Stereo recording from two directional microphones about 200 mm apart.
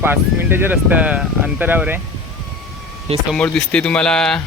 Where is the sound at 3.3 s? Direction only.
5° left (ahead or behind).